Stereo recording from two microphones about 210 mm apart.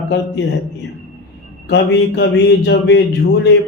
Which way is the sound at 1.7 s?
55° left (ahead or behind).